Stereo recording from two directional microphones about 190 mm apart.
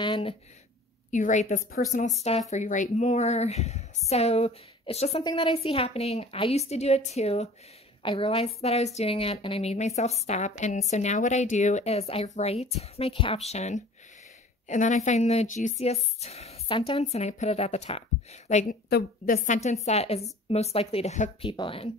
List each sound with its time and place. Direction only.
0.0 s speech: 25° left (ahead or behind)
1.1 s a woman's voice: 40° left (ahead or behind)
18.9 s a woman's voice: 55° left (ahead or behind); by 21.9 s 30° left (ahead or behind)